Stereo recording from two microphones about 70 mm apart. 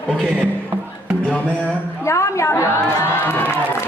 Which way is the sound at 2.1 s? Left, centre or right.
Left.